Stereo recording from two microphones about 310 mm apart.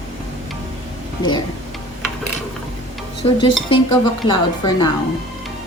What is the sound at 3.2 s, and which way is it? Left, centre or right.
Speech, centre.